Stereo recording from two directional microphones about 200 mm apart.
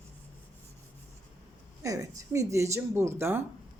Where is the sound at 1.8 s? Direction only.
15° right (ahead or behind).